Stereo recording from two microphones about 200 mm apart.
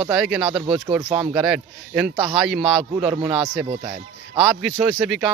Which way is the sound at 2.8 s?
25° right (ahead or behind).